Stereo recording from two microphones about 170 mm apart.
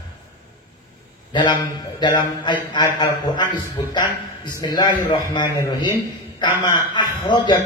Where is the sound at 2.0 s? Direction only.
25° left (ahead or behind).